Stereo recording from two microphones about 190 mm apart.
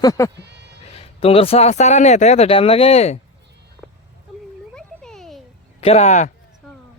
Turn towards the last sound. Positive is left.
turn(degrees=40)  # may be behind; listen again after turning